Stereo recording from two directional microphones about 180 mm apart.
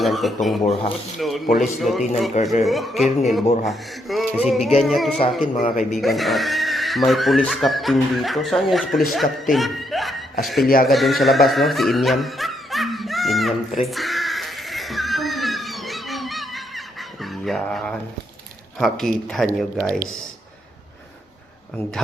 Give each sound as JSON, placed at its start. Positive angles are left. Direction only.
{"t": 0.0, "sound": "speech", "side_deg": 0}
{"t": 0.7, "sound": "speech", "side_deg": 30}
{"t": 1.2, "sound": "speech", "side_deg": 0}
{"t": 5.5, "sound": "a man's voice", "side_deg": 45}
{"t": 5.9, "sound": "speech", "side_deg": 0}
{"t": 13.7, "sound": "a sound", "side_deg": 0}
{"t": 17.2, "sound": "cat", "side_deg": 0}
{"t": 18.8, "sound": "speech", "side_deg": 0}